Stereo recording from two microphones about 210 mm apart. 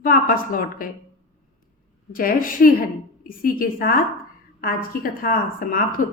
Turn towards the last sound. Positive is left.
turn(degrees=45)  # may be behind; listen again after turning